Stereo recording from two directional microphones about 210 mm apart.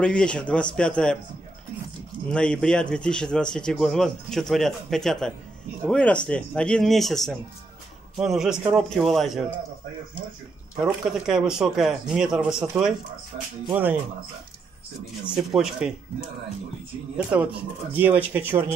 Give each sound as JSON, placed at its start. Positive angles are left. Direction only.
{"t": 0.0, "sound": "speech", "side_deg": 5}
{"t": 2.3, "sound": "speech", "side_deg": 5}
{"t": 10.8, "sound": "speech", "side_deg": -5}
{"t": 13.3, "sound": "speech", "side_deg": -25}
{"t": 13.7, "sound": "speech", "side_deg": -10}
{"t": 15.2, "sound": "speech", "side_deg": -5}
{"t": 17.3, "sound": "speech", "side_deg": -5}